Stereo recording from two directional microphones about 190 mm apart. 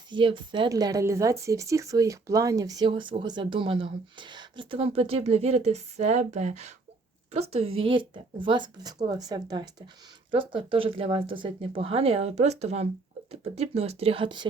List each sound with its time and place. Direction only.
0.1 s speech: 25° right (ahead or behind)
7.8 s speech: 25° right (ahead or behind)